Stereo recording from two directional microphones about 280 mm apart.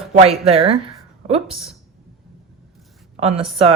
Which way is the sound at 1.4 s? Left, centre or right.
Centre.